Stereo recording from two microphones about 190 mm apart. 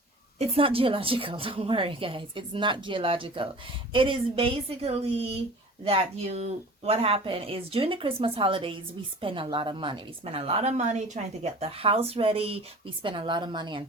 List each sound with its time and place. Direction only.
0.3 s a woman's voice: 30° right (ahead or behind)